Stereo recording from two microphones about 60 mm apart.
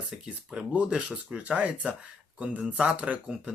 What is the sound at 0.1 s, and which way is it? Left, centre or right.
Speech, centre.